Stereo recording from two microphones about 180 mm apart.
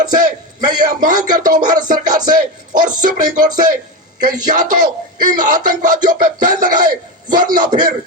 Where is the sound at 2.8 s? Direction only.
50° right (ahead or behind).